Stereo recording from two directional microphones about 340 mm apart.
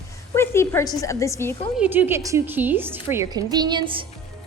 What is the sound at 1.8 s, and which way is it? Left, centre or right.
A woman's voice, centre.